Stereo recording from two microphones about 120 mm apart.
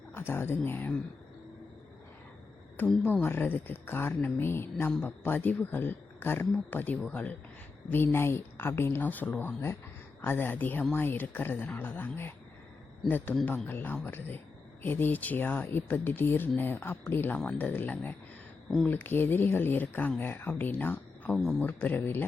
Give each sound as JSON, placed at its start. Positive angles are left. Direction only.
{"t": 0.1, "sound": "speech", "side_deg": 20}
{"t": 2.8, "sound": "speech", "side_deg": 5}
{"t": 3.1, "sound": "speech", "side_deg": 15}
{"t": 4.9, "sound": "speech", "side_deg": 5}
{"t": 5.2, "sound": "speech", "side_deg": 15}